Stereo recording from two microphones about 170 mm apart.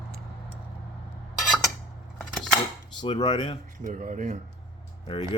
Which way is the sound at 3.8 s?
50° right (ahead or behind).